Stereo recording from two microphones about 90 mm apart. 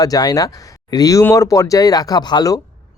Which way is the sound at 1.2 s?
35° left (ahead or behind).